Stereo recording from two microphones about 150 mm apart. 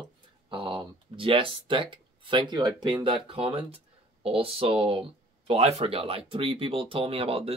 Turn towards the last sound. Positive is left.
turn(degrees=-40)  # may be behind; listen again after turning